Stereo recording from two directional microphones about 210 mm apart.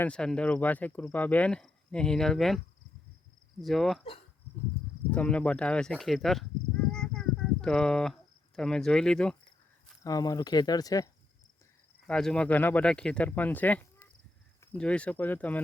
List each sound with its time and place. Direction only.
0.0 s speech: 5° left (ahead or behind)
3.6 s speech: centre (ahead or behind)
5.1 s speech: 5° left (ahead or behind)
6.9 s cricket: centre (ahead or behind)
10.0 s speech: 15° left (ahead or behind)
12.0 s speech: 5° left (ahead or behind)